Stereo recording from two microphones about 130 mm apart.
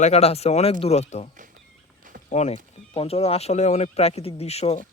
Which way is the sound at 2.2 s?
60° left (ahead or behind).